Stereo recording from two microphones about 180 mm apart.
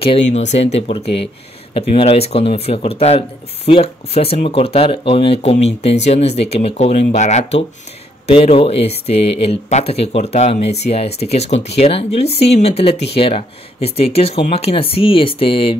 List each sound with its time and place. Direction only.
0.0 s speech: 35° left (ahead or behind)